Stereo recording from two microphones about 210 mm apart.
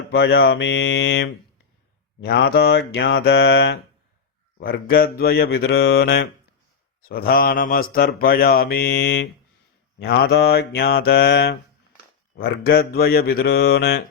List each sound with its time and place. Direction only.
0.1 s speech: 55° left (ahead or behind)
2.2 s mantra: 50° left (ahead or behind)